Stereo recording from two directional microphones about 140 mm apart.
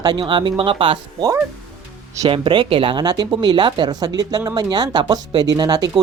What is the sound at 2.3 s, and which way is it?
Speech, 35° right (ahead or behind).